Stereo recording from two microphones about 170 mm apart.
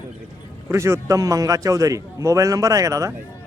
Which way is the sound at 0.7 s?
15° right (ahead or behind).